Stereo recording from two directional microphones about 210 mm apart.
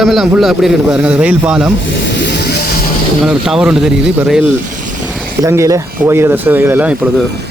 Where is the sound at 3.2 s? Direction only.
5° right (ahead or behind).